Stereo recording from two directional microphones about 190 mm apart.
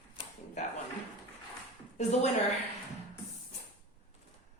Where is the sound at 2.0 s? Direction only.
35° left (ahead or behind).